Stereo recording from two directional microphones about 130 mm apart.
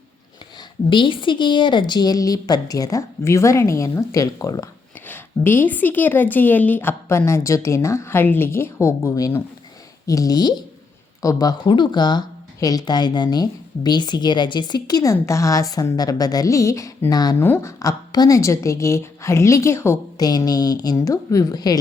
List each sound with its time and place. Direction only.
0.9 s speech: 40° left (ahead or behind)
4.9 s a woman's voice: 15° left (ahead or behind)
17.3 s speech: 20° left (ahead or behind)